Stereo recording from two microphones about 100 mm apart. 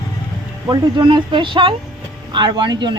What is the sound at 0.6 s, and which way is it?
Speech, 50° right (ahead or behind).